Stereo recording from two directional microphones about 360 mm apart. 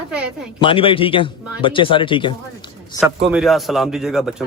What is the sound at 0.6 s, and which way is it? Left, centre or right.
A man's voice, centre.